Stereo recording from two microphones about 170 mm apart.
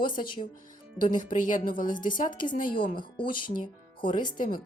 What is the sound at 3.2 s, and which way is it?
A woman's voice, 30° left (ahead or behind).